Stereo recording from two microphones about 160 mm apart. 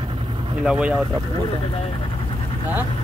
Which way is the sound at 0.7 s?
5° right (ahead or behind).